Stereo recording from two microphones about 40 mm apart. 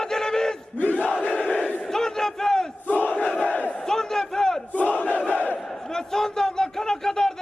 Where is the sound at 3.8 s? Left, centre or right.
Centre.